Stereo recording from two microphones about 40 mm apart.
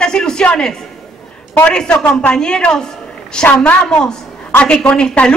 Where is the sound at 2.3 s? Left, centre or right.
Centre.